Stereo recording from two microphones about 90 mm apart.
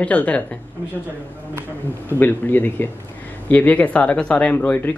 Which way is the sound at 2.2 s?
20° left (ahead or behind).